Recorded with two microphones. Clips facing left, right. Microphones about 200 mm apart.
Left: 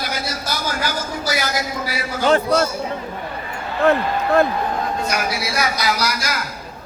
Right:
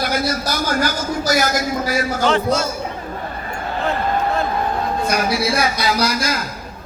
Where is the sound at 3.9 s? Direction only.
60° left (ahead or behind).